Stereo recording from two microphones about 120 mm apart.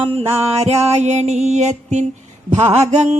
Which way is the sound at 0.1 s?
55° right (ahead or behind).